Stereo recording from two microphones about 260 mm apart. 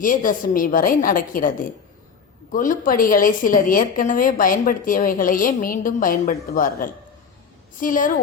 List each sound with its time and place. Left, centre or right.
0.0 s a woman's voice: left